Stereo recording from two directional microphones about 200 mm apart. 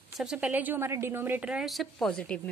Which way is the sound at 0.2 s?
5° right (ahead or behind).